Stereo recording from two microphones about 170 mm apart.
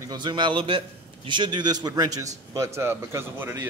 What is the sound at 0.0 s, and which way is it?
A man's voice, 25° right (ahead or behind).